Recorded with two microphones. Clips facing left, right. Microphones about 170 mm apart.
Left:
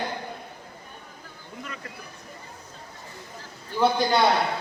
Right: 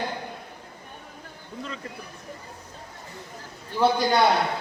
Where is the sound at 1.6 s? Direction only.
25° right (ahead or behind).